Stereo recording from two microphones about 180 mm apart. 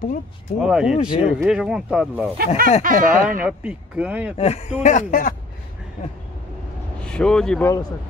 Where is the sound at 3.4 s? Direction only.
5° right (ahead or behind).